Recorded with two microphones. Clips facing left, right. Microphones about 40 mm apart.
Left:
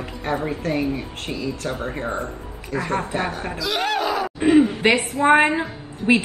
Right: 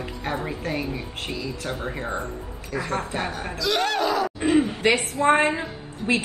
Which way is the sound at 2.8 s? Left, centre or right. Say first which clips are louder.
Left 4 dB; left.